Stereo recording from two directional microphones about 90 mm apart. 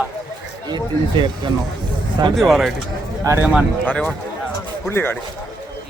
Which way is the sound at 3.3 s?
40° right (ahead or behind).